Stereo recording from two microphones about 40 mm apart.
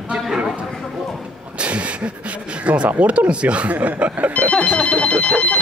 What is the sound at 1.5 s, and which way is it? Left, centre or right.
Speech, right.